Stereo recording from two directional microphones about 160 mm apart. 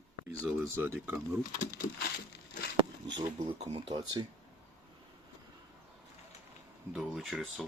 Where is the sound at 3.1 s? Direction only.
30° right (ahead or behind).